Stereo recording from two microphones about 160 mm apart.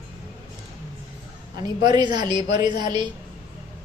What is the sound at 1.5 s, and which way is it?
A woman's voice, 25° right (ahead or behind).